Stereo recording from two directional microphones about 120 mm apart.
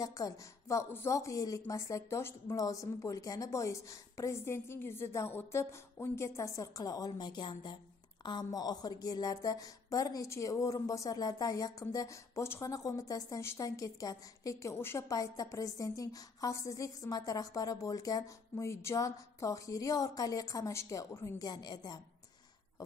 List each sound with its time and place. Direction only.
0.0 s a woman's voice: 30° left (ahead or behind)